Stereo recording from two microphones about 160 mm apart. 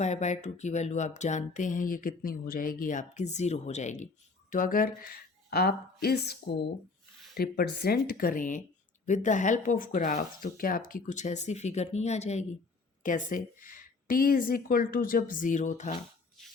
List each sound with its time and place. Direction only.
0.0 s a woman's voice: 45° left (ahead or behind)